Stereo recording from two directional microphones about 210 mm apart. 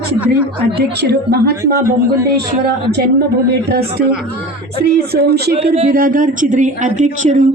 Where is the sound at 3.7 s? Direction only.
45° right (ahead or behind).